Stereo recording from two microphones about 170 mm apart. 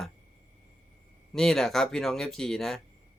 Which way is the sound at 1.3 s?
Centre (ahead or behind).